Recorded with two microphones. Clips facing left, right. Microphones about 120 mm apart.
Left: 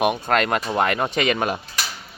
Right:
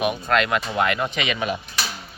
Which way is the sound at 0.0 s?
45° left (ahead or behind).